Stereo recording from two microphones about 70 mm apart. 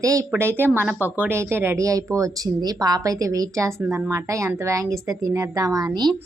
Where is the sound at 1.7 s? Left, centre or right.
Right.